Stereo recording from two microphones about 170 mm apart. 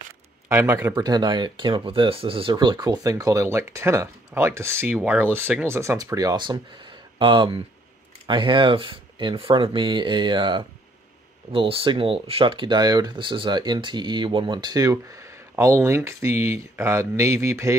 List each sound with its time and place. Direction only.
0.5 s speech: 15° right (ahead or behind)